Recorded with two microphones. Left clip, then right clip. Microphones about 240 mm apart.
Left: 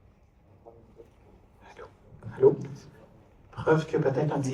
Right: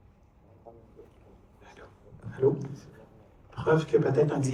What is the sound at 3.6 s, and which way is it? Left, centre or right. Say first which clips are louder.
Speech: left 1 dB; left.